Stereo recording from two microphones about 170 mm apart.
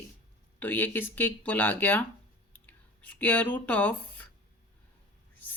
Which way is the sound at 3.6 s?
10° left (ahead or behind).